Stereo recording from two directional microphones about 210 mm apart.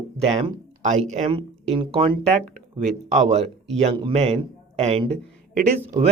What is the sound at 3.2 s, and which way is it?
Speech, 30° right (ahead or behind).